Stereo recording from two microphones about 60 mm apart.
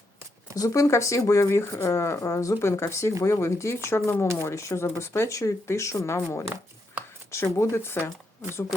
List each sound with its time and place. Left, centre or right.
0.5 s speech: left